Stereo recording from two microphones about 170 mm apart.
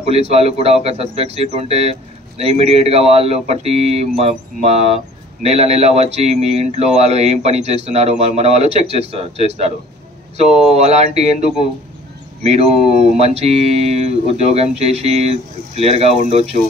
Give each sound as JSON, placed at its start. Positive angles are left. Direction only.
{"t": 0.0, "sound": "speech", "side_deg": -35}
{"t": 12.4, "sound": "speech", "side_deg": -40}